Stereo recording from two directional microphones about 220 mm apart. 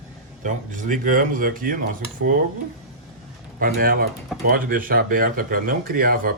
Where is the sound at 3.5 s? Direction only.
40° right (ahead or behind).